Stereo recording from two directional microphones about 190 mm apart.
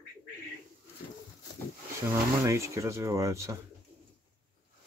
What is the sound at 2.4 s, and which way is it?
Speech, 15° right (ahead or behind).